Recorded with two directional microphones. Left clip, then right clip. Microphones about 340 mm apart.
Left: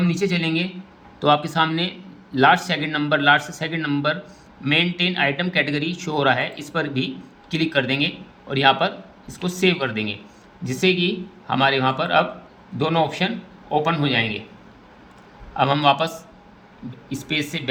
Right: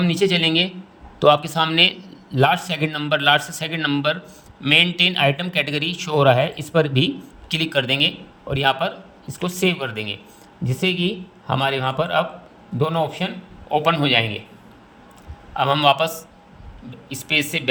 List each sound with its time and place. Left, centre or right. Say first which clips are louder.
0.0 s a man's voice: right 4 dB; right
15.5 s a man's voice: right 1 dB; right